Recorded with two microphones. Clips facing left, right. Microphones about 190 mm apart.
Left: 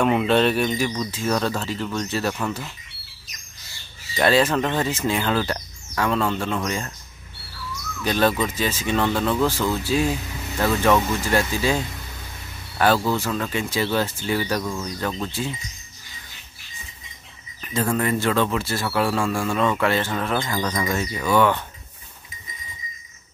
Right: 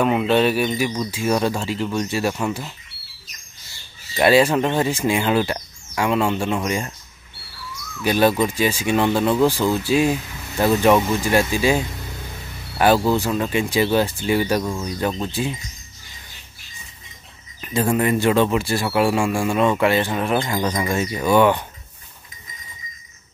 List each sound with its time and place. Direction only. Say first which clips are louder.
0.0 s speech: right 1 dB; 5° right (ahead or behind)
4.2 s speech: right 3 dB; 10° right (ahead or behind)
8.0 s speech: right 3 dB; 10° right (ahead or behind)
17.6 s speech: right 3 dB; 15° right (ahead or behind)